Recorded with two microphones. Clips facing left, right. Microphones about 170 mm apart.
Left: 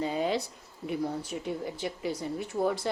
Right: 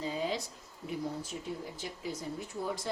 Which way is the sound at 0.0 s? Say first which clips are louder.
Left 5 dB; 65° left (ahead or behind).